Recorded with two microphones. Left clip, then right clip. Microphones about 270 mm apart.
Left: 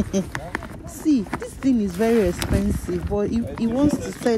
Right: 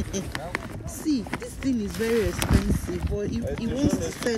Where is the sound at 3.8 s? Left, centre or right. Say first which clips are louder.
Left 5 dB; centre.